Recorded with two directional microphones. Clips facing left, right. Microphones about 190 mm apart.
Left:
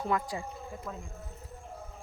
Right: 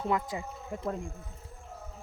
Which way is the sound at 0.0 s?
20° right (ahead or behind).